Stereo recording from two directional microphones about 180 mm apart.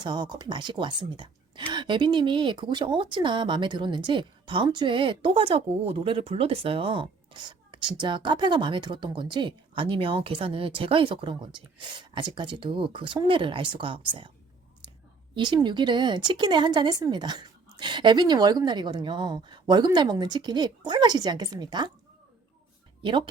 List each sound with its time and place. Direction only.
0.0 s speech: 25° right (ahead or behind)
15.4 s speech: 25° right (ahead or behind)
23.0 s speech: 25° right (ahead or behind)